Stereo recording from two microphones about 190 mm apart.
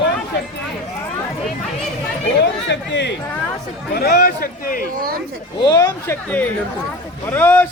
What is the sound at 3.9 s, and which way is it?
Speech, 55° left (ahead or behind).